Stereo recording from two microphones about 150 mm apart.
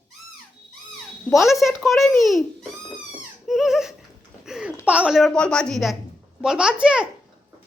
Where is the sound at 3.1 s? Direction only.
Centre (ahead or behind).